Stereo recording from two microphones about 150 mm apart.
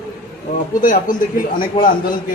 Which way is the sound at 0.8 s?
65° left (ahead or behind).